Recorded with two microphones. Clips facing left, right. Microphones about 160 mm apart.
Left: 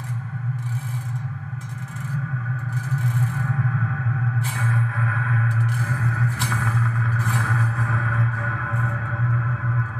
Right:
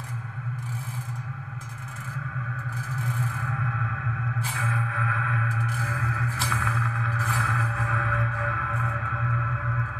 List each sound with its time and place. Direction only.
4.6 s music: 40° left (ahead or behind)